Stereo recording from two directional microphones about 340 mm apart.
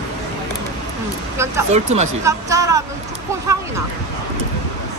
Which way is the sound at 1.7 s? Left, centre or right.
Centre.